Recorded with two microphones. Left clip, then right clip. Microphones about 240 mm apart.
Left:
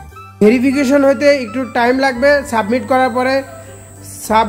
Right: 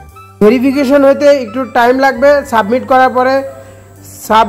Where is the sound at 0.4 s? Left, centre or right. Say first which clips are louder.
Right 3 dB; centre.